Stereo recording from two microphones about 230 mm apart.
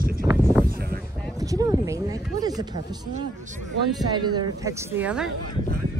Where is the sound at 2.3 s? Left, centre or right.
Centre.